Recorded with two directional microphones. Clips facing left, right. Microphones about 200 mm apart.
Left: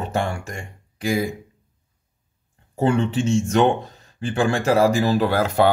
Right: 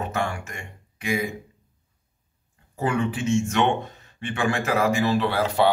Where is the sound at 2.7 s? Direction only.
30° left (ahead or behind).